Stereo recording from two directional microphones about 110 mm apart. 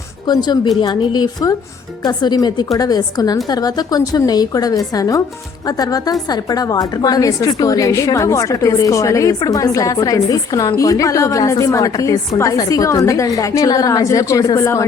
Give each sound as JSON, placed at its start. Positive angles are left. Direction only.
{"t": 0.3, "sound": "a woman's voice", "side_deg": 40}